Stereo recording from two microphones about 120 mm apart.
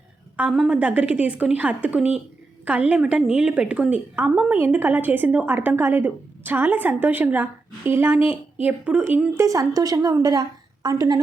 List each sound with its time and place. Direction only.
0.5 s a woman's voice: 5° right (ahead or behind)
9.4 s a woman's voice: 30° right (ahead or behind)